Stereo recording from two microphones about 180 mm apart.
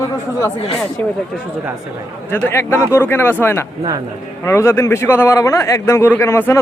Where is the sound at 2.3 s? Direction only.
10° left (ahead or behind).